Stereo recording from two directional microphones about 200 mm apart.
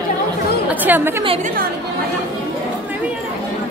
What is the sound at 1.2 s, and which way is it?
Speech, 30° right (ahead or behind).